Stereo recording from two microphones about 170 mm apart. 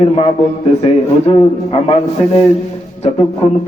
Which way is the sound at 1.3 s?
35° left (ahead or behind).